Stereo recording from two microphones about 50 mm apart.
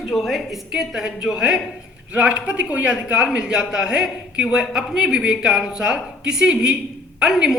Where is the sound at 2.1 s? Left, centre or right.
Right.